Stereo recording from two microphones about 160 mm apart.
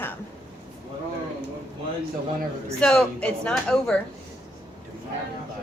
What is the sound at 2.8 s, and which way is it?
Speech, 5° left (ahead or behind).